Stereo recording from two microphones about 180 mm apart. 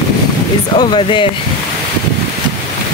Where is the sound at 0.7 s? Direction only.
25° left (ahead or behind).